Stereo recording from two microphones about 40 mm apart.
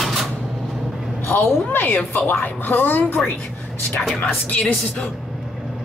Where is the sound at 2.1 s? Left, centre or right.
Left.